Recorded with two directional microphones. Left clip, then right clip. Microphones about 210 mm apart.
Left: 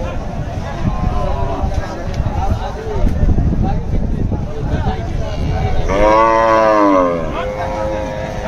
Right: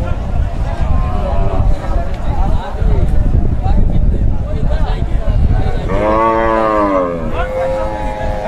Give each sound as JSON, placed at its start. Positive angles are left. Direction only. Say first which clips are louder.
{"t": 5.9, "sound": "cattle", "louder": "left 2 dB", "side_deg": 45}